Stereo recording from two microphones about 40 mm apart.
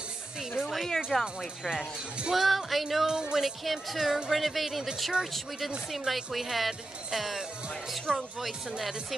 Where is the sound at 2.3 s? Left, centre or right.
Centre.